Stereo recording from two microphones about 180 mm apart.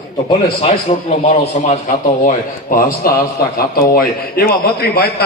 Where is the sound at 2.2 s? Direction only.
50° left (ahead or behind).